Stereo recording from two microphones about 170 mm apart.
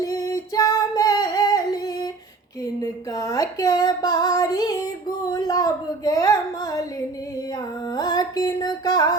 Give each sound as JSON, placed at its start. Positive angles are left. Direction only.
{"t": 0.0, "sound": "singing", "side_deg": 20}
{"t": 3.1, "sound": "female singing", "side_deg": 20}
{"t": 5.3, "sound": "a sound", "side_deg": 20}
{"t": 7.9, "sound": "music", "side_deg": 25}